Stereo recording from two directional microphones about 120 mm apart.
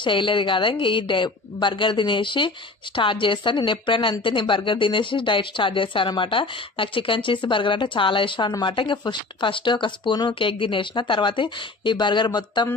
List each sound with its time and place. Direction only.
0.0 s speech: 45° left (ahead or behind)